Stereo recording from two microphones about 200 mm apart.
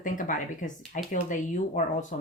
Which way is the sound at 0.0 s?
40° left (ahead or behind).